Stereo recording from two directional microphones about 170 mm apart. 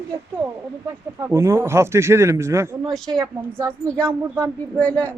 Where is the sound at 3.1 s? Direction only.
30° right (ahead or behind).